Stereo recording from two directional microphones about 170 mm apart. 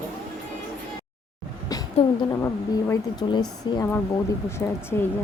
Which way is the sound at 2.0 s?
35° left (ahead or behind).